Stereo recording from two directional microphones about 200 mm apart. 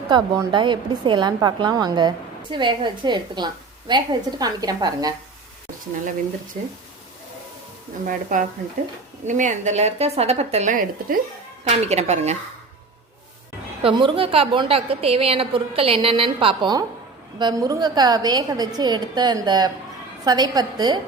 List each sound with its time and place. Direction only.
0.1 s a woman's voice: 20° right (ahead or behind)
8.0 s a woman's voice: 40° right (ahead or behind)
13.8 s a woman's voice: 25° right (ahead or behind)